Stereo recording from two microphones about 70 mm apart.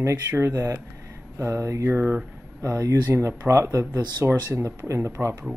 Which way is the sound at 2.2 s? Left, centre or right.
Centre.